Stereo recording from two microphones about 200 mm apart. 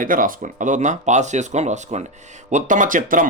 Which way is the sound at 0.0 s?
45° right (ahead or behind).